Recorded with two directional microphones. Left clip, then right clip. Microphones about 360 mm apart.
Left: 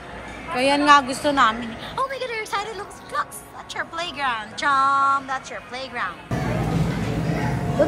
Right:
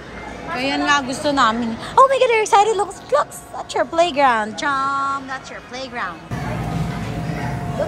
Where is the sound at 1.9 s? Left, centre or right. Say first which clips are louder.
Right 14 dB; right.